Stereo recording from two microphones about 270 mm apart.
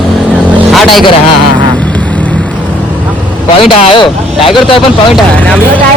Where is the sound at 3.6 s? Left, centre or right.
Centre.